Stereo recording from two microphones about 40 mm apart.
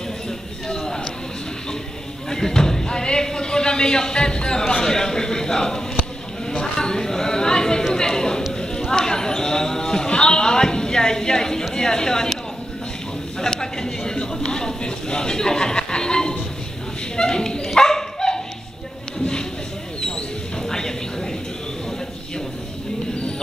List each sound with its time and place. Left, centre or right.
2.2 s a sound: centre
11.7 s speech: centre
13.4 s a sound: centre
17.2 s speech: centre
17.7 s dog: centre
20.6 s music: centre